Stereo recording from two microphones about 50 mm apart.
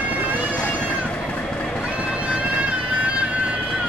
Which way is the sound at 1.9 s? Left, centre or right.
Right.